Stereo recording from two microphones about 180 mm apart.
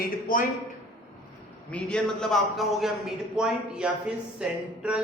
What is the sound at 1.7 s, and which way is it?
A man's voice, 5° left (ahead or behind).